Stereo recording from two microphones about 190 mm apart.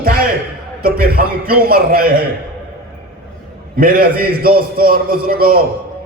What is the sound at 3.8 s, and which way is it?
Speech, 50° right (ahead or behind).